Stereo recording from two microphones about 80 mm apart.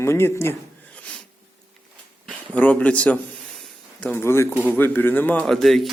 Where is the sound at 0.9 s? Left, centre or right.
Centre.